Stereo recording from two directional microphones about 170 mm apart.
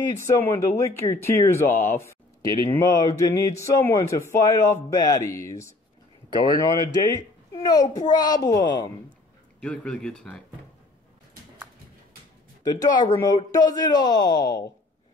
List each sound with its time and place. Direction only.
0.3 s speech: 15° left (ahead or behind)
9.6 s speech: 5° left (ahead or behind)
12.6 s speech: 20° left (ahead or behind)